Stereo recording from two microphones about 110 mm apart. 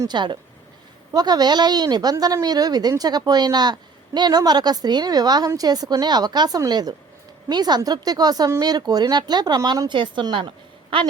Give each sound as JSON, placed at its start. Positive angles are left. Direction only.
{"t": 0.1, "sound": "a woman's voice", "side_deg": -45}